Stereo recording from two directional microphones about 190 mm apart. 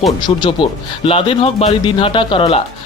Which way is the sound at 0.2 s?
25° left (ahead or behind).